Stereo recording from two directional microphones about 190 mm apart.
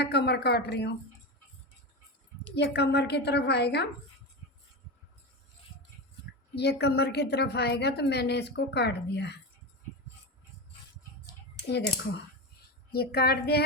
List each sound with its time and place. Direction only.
0.0 s a woman's voice: 60° left (ahead or behind)
2.6 s a woman's voice: 60° left (ahead or behind)
6.6 s a woman's voice: 60° left (ahead or behind)
12.9 s a woman's voice: 55° left (ahead or behind)